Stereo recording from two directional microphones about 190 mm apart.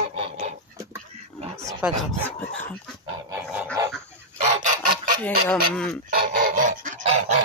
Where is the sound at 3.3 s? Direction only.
5° right (ahead or behind).